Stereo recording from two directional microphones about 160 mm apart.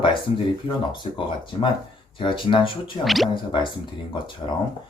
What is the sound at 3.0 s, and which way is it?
Speech, centre (ahead or behind).